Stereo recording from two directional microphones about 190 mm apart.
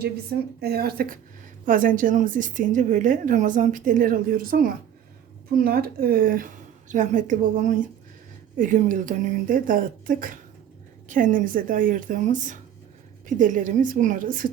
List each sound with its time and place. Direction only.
0.0 s a woman's voice: 55° right (ahead or behind)